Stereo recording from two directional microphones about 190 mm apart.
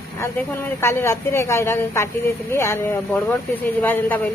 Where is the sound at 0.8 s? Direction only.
15° left (ahead or behind).